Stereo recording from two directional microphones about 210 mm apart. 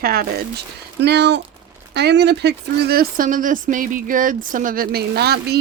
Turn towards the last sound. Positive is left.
turn(degrees=-50)  # may be behind; listen again after turning